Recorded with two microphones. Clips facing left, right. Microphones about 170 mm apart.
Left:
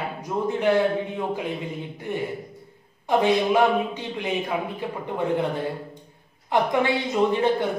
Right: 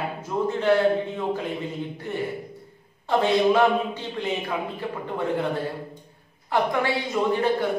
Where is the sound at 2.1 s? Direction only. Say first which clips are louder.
Left 2 dB; 15° left (ahead or behind).